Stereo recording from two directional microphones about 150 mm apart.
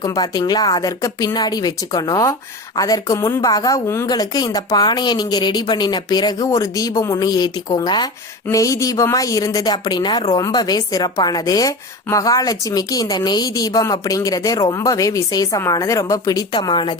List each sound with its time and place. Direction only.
0.0 s speech: 25° left (ahead or behind)